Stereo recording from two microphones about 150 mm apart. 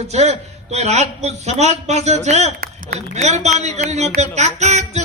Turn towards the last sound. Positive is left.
turn(degrees=-50)  # may be behind; listen again after turning